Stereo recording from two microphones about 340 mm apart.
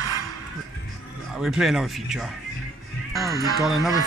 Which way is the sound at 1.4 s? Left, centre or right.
Centre.